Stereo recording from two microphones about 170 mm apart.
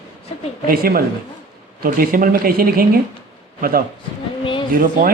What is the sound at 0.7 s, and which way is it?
Speech, 60° right (ahead or behind).